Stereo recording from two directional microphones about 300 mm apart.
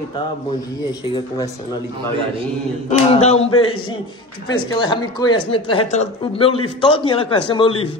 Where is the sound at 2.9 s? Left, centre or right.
Left.